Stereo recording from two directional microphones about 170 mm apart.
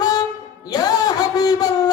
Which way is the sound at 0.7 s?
20° left (ahead or behind).